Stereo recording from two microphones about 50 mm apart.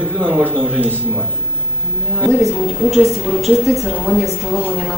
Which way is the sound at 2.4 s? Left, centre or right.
Centre.